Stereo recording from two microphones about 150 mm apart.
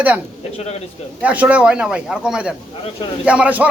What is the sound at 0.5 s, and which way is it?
Speech, 45° left (ahead or behind).